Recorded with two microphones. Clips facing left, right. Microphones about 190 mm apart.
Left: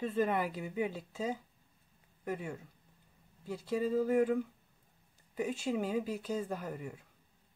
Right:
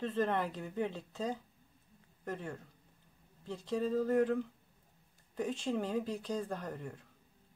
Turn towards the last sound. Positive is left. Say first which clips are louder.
# left 1 dB
turn(degrees=10)  # may be behind; listen again after turning